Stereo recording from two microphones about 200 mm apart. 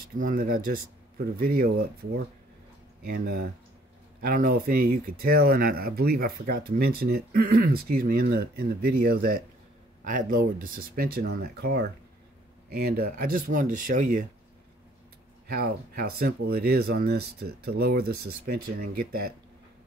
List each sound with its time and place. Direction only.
0.2 s speech: 45° right (ahead or behind)
15.4 s speech: 50° right (ahead or behind)